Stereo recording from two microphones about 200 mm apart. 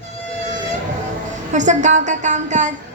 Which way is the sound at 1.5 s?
40° right (ahead or behind).